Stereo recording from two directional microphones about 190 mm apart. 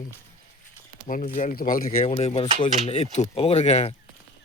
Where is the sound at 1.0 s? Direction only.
45° left (ahead or behind).